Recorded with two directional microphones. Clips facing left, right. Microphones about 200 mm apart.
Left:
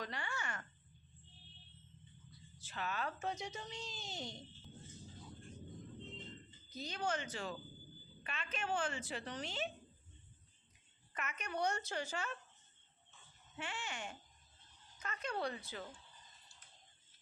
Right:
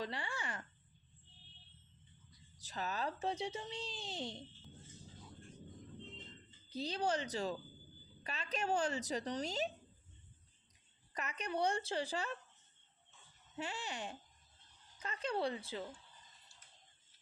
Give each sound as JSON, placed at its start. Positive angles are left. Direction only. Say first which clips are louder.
{"t": 0.0, "sound": "a sound", "louder": "right 2 dB", "side_deg": -30}
{"t": 2.6, "sound": "speech", "louder": "right 2 dB", "side_deg": -40}
{"t": 6.7, "sound": "speech", "louder": "right 4 dB", "side_deg": -30}
{"t": 11.1, "sound": "speech", "louder": "right 3 dB", "side_deg": -35}
{"t": 13.6, "sound": "speech", "louder": "right 3 dB", "side_deg": -35}